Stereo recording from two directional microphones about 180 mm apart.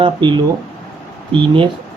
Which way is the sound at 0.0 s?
25° right (ahead or behind).